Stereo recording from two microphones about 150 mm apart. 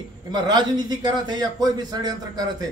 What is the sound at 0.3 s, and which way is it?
A man's voice, 30° right (ahead or behind).